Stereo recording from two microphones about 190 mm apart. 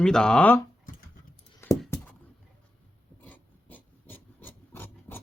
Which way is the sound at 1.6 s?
10° left (ahead or behind).